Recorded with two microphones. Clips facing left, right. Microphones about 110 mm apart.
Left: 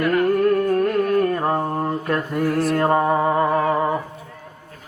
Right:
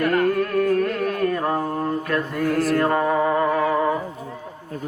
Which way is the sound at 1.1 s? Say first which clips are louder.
Left 3 dB; 25° left (ahead or behind).